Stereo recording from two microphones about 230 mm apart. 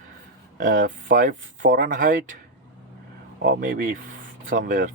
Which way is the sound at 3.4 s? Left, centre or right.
Right.